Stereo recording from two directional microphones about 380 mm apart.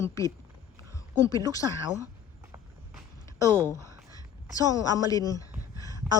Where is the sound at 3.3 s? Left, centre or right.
Centre.